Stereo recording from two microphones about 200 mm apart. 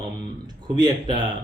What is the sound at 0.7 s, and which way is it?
Speech, 20° right (ahead or behind).